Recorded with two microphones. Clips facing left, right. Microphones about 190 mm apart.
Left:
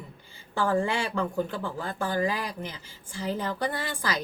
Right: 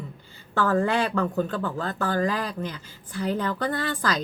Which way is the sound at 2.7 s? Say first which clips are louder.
Right 6 dB; 60° right (ahead or behind).